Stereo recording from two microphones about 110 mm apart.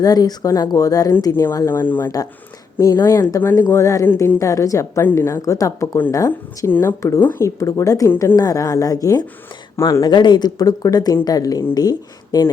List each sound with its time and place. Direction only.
0.0 s speech: 35° left (ahead or behind); by 2.1 s 20° left (ahead or behind)
2.7 s speech: 30° left (ahead or behind)
4.1 s a woman's voice: 20° left (ahead or behind)
4.4 s speech: 30° left (ahead or behind)
10.0 s speech: 40° left (ahead or behind)